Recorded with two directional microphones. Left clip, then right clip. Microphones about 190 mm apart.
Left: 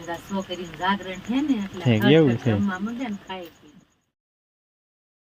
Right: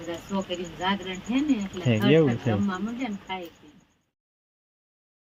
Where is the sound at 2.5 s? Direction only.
15° left (ahead or behind).